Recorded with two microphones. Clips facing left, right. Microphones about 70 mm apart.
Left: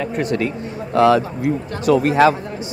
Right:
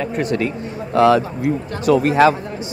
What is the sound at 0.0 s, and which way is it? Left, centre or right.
Speech, right.